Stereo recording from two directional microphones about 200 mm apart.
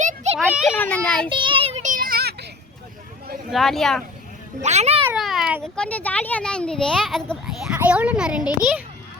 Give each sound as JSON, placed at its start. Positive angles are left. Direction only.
{"t": 0.0, "sound": "children playing", "side_deg": -35}
{"t": 0.3, "sound": "a child's voice", "side_deg": -5}
{"t": 0.8, "sound": "a child's voice", "side_deg": 10}
{"t": 1.3, "sound": "child singing", "side_deg": -25}
{"t": 3.5, "sound": "speech", "side_deg": 0}
{"t": 4.6, "sound": "a child's voice", "side_deg": -35}
{"t": 5.0, "sound": "a sound", "side_deg": 0}
{"t": 5.7, "sound": "speech", "side_deg": 5}